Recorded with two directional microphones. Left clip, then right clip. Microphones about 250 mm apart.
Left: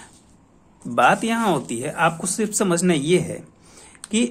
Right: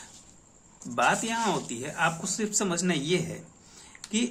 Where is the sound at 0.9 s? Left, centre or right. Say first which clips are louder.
Left 8 dB; left.